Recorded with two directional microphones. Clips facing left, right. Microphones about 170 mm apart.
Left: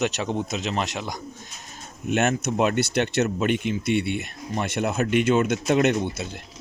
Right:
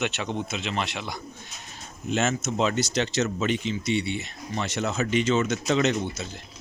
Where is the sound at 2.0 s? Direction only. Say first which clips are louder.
Left 3 dB; 60° left (ahead or behind).